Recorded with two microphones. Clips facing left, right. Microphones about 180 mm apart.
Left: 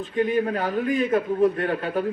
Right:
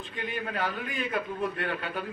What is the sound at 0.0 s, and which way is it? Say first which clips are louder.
A man's voice: left 13 dB; 40° left (ahead or behind).